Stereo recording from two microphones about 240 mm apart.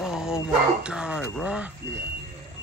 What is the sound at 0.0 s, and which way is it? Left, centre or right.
Speech, centre.